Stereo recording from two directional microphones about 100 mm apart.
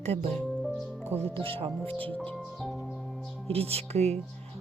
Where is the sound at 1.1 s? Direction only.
75° right (ahead or behind).